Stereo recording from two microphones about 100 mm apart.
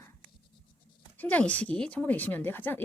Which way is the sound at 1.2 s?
15° left (ahead or behind).